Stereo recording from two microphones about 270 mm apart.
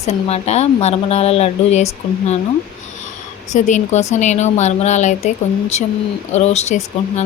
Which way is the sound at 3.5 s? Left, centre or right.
Left.